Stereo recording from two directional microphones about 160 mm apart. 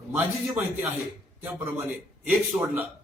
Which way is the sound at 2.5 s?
10° right (ahead or behind).